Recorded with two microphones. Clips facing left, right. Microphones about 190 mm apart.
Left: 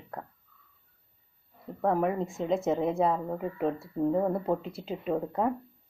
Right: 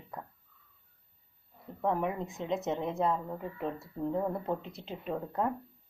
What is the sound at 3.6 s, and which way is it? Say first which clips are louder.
Speech: left 7 dB; 35° left (ahead or behind).